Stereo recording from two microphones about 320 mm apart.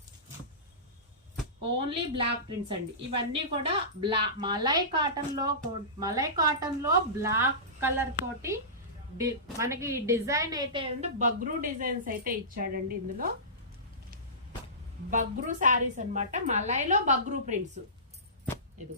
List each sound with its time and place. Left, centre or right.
1.9 s a woman's voice: centre
9.6 s a woman's voice: centre; by 13.3 s right
15.1 s a woman's voice: right
18.8 s a woman's voice: right